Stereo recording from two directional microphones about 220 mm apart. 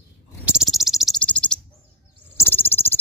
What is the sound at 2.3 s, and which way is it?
Bird, 10° left (ahead or behind).